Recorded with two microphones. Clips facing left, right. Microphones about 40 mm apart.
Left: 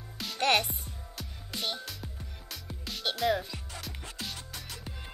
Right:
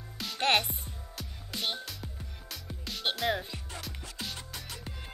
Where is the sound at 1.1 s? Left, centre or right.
Centre.